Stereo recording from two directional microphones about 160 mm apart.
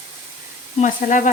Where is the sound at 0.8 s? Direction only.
50° left (ahead or behind).